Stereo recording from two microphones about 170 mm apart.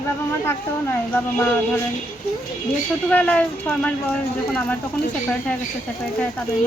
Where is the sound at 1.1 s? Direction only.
15° left (ahead or behind).